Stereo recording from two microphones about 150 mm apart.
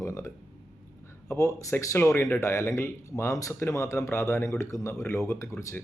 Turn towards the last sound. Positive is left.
turn(degrees=15)  # may be behind; listen again after turning